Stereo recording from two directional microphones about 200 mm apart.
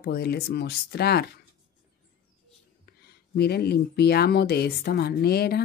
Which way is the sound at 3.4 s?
50° left (ahead or behind).